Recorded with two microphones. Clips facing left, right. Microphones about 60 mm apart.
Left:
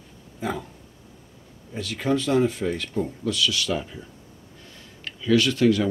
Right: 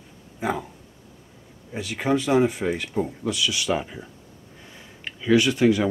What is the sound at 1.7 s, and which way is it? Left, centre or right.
Speech, centre.